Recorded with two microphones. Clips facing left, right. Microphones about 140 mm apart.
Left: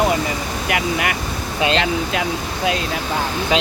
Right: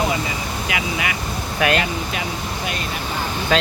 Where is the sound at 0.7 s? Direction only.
55° left (ahead or behind).